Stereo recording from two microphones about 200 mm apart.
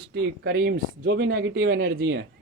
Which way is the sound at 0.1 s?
50° right (ahead or behind).